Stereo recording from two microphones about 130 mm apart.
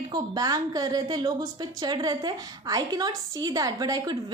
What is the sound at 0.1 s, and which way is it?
A woman's voice, 30° right (ahead or behind).